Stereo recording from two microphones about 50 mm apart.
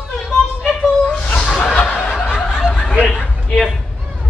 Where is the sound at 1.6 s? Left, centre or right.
Left.